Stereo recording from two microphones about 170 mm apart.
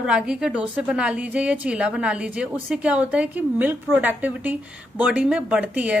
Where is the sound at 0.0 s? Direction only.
5° right (ahead or behind).